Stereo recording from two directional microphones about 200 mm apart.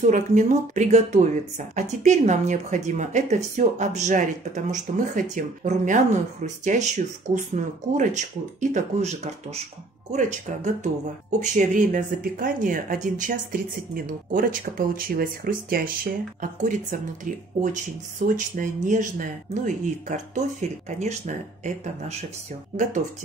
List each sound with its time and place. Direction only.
0.0 s speech: 40° right (ahead or behind)